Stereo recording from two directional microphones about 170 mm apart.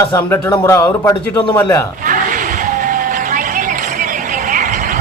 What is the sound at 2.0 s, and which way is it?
Vehicle, 50° right (ahead or behind).